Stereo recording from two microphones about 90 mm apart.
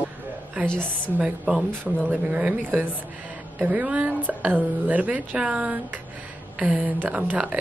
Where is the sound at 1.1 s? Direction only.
10° right (ahead or behind).